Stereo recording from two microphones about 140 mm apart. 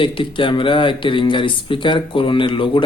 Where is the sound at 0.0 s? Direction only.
40° left (ahead or behind).